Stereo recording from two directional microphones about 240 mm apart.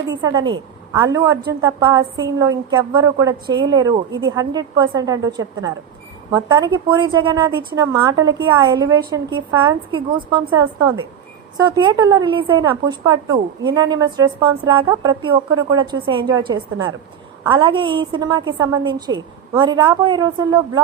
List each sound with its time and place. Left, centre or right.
0.2 s a woman's voice: centre